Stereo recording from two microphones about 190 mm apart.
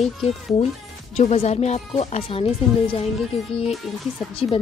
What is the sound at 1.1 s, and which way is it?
Speech, 35° left (ahead or behind).